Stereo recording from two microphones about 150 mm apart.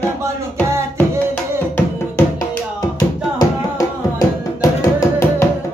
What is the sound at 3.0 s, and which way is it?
Music, 25° left (ahead or behind).